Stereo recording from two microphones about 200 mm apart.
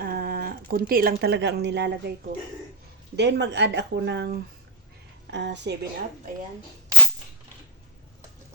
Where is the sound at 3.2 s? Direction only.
60° right (ahead or behind).